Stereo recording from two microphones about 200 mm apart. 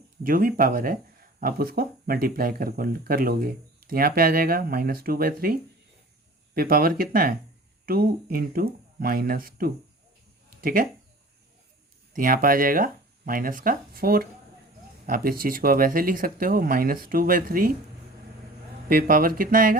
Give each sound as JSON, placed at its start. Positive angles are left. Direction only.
{"t": 0.2, "sound": "speech", "side_deg": -45}
{"t": 6.5, "sound": "speech", "side_deg": -50}
{"t": 12.1, "sound": "speech", "side_deg": -45}
{"t": 18.9, "sound": "speech", "side_deg": -45}